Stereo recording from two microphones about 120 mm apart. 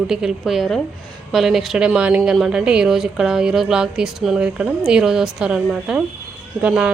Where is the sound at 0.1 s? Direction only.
5° right (ahead or behind).